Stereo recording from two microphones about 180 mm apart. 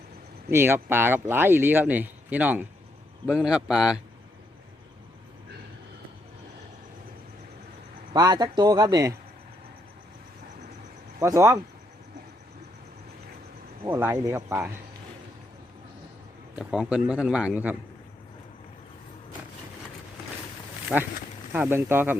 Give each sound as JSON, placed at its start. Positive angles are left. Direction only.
{"t": 0.5, "sound": "speech", "side_deg": -15}
{"t": 8.1, "sound": "speech", "side_deg": -20}
{"t": 11.2, "sound": "speech", "side_deg": -15}
{"t": 13.8, "sound": "speech", "side_deg": -15}
{"t": 16.6, "sound": "speech", "side_deg": -5}
{"t": 20.9, "sound": "speech", "side_deg": 0}